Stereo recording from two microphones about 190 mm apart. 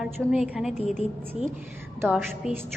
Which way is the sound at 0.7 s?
35° left (ahead or behind).